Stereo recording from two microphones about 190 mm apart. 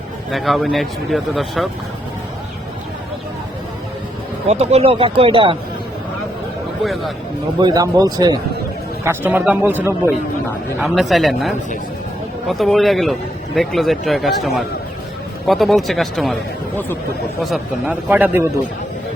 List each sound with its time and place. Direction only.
0.3 s speech: centre (ahead or behind)
4.4 s speech: 35° right (ahead or behind)
6.8 s speech: centre (ahead or behind)
7.6 s speech: 20° right (ahead or behind)
9.0 s speech: 10° right (ahead or behind)
10.8 s speech: centre (ahead or behind)